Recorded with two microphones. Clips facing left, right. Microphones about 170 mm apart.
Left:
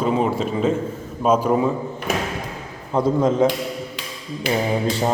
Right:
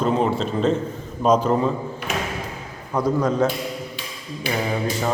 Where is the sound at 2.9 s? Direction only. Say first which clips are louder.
Left 3 dB; 25° left (ahead or behind).